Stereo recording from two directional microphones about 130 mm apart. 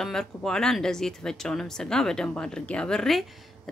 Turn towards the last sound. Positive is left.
turn(degrees=5)  # may be behind; listen again after turning